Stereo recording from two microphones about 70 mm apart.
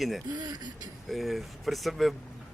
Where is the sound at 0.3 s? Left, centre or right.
Right.